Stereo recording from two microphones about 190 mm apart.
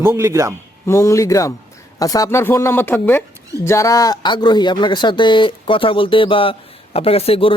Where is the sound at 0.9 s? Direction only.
15° left (ahead or behind).